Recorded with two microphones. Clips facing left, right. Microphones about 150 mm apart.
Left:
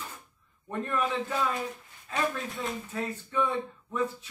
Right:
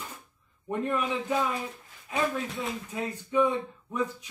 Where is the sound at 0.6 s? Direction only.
15° right (ahead or behind).